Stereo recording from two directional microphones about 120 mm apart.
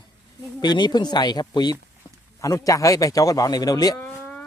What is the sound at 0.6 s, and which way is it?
A man's voice, 35° left (ahead or behind).